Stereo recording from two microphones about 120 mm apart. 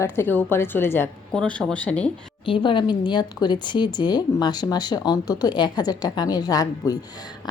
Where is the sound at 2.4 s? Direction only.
45° left (ahead or behind).